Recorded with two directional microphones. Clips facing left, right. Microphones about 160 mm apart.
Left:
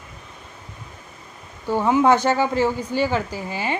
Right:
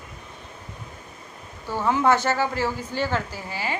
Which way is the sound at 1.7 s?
15° left (ahead or behind).